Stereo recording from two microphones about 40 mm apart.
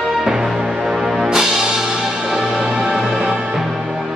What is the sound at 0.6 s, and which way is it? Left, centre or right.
Music, centre.